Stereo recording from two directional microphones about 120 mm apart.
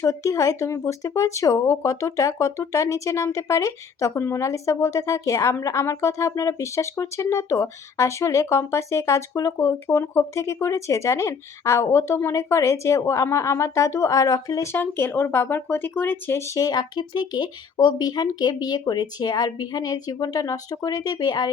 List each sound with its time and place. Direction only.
0.0 s speech: 25° left (ahead or behind)